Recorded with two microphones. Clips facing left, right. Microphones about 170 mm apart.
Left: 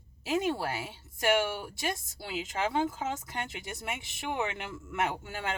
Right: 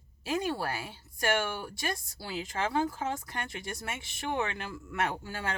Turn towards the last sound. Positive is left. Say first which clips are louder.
# even
turn(degrees=20)  # may be behind; listen again after turning